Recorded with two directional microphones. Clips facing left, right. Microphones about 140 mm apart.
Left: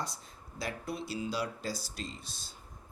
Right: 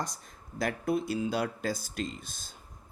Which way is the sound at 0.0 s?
50° right (ahead or behind).